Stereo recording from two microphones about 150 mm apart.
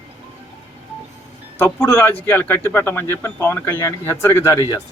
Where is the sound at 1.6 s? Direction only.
15° left (ahead or behind).